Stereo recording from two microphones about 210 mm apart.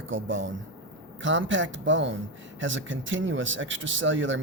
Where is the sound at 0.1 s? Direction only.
65° right (ahead or behind).